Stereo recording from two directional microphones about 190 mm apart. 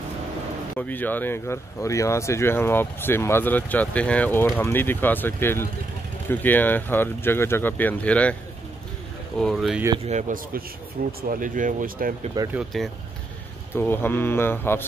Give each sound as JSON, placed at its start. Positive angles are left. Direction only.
{"t": 0.7, "sound": "speech", "side_deg": 10}
{"t": 9.4, "sound": "speech", "side_deg": 0}
{"t": 10.0, "sound": "speech", "side_deg": -40}
{"t": 12.5, "sound": "speech", "side_deg": 0}
{"t": 13.7, "sound": "speech", "side_deg": 10}